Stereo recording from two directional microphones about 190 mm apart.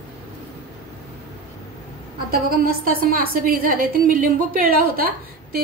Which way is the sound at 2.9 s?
50° right (ahead or behind).